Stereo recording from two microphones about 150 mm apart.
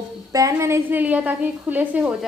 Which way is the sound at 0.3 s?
20° right (ahead or behind).